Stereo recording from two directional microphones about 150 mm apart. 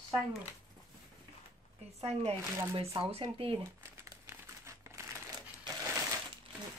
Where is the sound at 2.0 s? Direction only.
45° right (ahead or behind).